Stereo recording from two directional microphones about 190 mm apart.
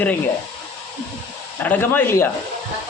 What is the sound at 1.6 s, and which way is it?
Speech, 10° left (ahead or behind).